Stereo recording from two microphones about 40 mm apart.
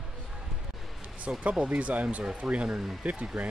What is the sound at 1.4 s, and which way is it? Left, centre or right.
Speech, right.